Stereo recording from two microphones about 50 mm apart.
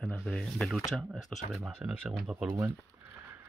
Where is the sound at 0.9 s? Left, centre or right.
Centre.